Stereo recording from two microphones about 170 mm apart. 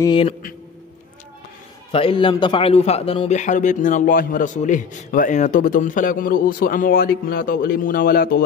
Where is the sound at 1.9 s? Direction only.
30° left (ahead or behind).